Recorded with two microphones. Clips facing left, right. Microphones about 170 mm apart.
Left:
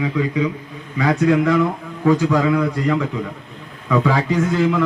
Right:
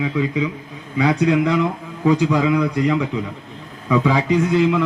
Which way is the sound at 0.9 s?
15° right (ahead or behind).